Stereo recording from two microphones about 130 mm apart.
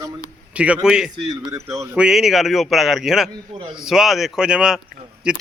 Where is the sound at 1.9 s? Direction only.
5° right (ahead or behind).